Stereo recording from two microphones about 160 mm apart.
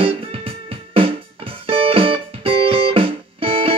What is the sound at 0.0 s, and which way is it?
Music, 35° right (ahead or behind).